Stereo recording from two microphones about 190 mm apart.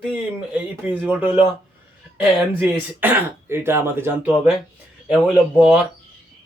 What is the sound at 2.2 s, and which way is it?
Speech, 10° right (ahead or behind).